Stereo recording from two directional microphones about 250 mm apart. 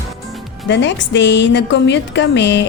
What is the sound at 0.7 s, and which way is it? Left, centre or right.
A woman's voice, left.